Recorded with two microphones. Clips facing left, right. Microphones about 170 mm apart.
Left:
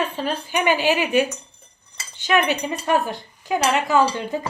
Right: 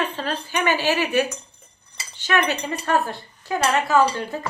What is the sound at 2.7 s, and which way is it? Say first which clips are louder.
Speech: even; 15° left (ahead or behind).